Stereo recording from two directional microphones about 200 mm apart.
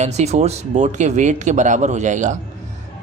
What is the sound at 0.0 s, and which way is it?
Speech, 35° right (ahead or behind).